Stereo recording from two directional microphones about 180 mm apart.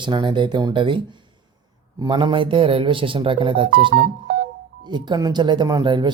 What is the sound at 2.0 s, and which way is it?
Speech, 25° right (ahead or behind).